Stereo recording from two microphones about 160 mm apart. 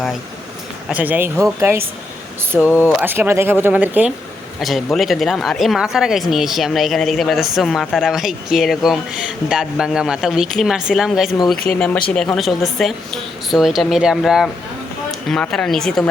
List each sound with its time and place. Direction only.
0.9 s speech: 10° right (ahead or behind)
2.6 s speech: 15° left (ahead or behind)
3.0 s speech: 15° right (ahead or behind)
4.6 s speech: centre (ahead or behind)